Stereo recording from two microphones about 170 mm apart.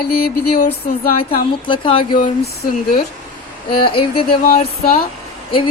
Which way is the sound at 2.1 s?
60° left (ahead or behind).